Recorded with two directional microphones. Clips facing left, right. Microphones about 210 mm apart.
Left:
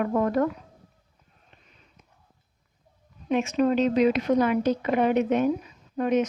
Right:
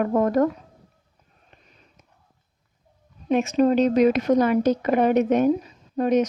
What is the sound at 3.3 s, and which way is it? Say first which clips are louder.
A woman's voice: right 4 dB; 40° right (ahead or behind).